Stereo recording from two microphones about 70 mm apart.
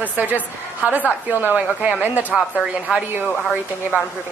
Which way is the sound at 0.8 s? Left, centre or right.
Right.